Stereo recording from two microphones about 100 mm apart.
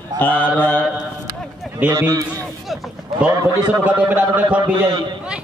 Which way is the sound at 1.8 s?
30° right (ahead or behind).